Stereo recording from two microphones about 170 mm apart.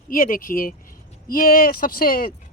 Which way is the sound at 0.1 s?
55° left (ahead or behind).